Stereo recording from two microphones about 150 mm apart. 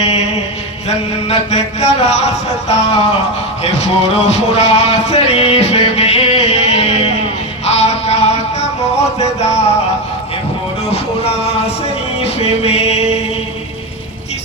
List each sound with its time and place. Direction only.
0.0 s mantra: 45° left (ahead or behind)
0.9 s music: 45° left (ahead or behind)
4.1 s music: 50° left (ahead or behind)
10.9 s music: 45° left (ahead or behind)